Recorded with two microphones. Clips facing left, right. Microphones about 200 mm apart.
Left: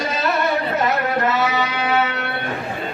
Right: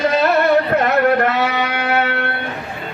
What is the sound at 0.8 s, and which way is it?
Music, 60° right (ahead or behind).